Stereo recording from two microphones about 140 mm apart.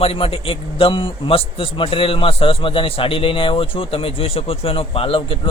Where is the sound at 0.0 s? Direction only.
40° left (ahead or behind).